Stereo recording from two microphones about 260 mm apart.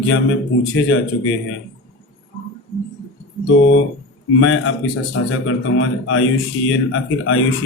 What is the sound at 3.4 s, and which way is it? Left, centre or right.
Speech, left.